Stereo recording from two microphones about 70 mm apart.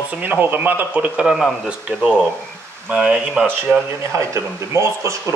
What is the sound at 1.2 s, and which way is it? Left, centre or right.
Speech, centre.